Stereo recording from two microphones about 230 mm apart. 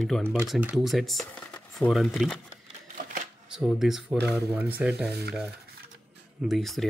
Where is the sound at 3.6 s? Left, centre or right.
Centre.